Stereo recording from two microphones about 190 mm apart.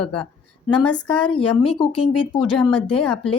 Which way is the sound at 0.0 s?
5° left (ahead or behind).